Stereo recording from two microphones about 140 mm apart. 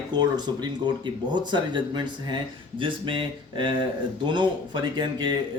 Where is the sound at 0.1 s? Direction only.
30° right (ahead or behind).